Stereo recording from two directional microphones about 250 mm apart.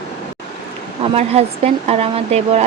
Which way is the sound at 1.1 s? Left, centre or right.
Right.